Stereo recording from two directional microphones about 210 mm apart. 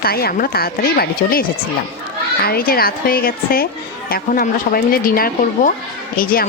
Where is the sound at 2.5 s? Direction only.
45° left (ahead or behind).